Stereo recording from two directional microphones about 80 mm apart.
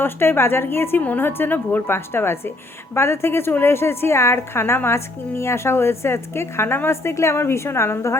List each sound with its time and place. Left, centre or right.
0.0 s a woman's voice: left